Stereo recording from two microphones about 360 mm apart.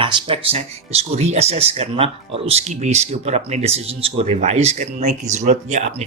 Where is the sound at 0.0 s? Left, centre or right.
Centre.